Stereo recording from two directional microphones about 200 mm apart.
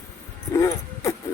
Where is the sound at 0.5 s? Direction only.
15° left (ahead or behind).